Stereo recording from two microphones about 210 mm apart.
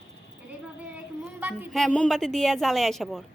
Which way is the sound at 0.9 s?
10° right (ahead or behind).